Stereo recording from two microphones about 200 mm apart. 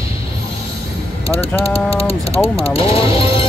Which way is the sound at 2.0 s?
30° left (ahead or behind).